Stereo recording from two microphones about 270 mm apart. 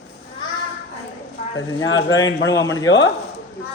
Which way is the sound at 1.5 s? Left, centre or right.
Left.